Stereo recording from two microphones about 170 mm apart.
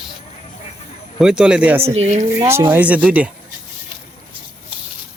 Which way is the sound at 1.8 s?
40° right (ahead or behind).